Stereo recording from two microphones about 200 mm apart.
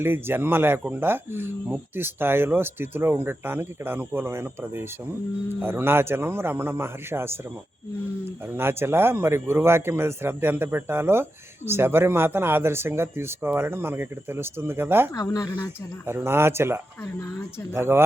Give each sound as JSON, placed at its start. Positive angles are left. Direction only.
{"t": 0.0, "sound": "a man's voice", "side_deg": -10}
{"t": 8.5, "sound": "a man's voice", "side_deg": -10}
{"t": 15.1, "sound": "speech", "side_deg": 20}
{"t": 16.0, "sound": "a man's voice", "side_deg": -10}